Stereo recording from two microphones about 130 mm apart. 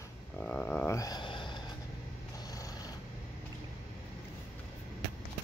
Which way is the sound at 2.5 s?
25° left (ahead or behind).